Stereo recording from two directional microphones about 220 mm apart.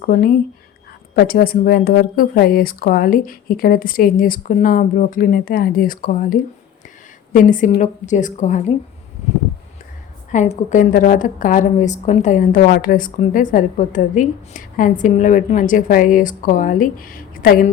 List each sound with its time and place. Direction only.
0.0 s a woman's voice: 45° left (ahead or behind)
10.3 s a woman's voice: 35° left (ahead or behind)